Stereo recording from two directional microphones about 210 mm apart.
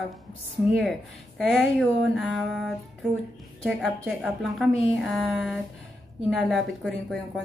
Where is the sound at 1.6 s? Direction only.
Centre (ahead or behind).